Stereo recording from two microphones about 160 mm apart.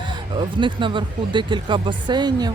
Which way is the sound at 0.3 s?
30° right (ahead or behind).